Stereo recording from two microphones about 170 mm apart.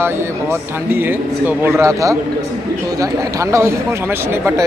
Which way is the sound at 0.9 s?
10° right (ahead or behind).